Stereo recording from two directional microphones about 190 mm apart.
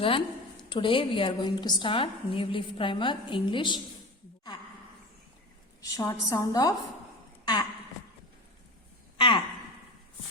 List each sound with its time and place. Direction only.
0.0 s a woman's voice: 25° left (ahead or behind)
5.8 s a woman's voice: 20° left (ahead or behind)
9.1 s a sound: 25° left (ahead or behind)